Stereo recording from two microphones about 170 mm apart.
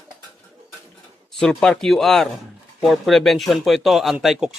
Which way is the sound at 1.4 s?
5° left (ahead or behind).